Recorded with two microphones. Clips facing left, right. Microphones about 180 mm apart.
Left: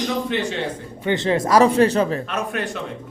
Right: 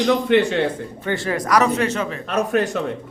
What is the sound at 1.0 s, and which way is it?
Speech, 20° left (ahead or behind).